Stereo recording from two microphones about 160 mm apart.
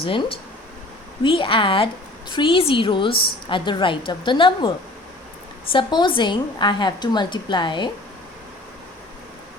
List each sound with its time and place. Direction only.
0.0 s a woman's voice: 35° left (ahead or behind)